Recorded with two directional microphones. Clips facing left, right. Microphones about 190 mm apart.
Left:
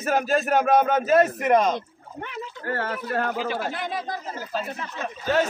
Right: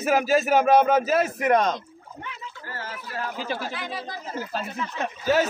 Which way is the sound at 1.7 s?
60° left (ahead or behind).